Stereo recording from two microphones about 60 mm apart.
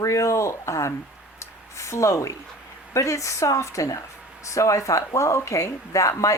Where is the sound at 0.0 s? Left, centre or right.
Left.